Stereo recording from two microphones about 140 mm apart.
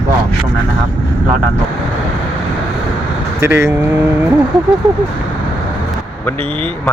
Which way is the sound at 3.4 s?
20° right (ahead or behind).